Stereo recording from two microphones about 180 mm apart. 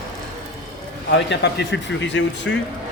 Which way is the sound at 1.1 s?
75° left (ahead or behind).